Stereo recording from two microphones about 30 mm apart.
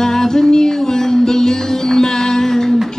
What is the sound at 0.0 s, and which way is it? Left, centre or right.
Music, centre.